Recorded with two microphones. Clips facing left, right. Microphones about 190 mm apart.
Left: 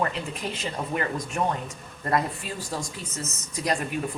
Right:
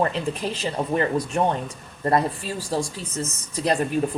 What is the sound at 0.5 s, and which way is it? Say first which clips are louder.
Speech: right 5 dB; 30° right (ahead or behind).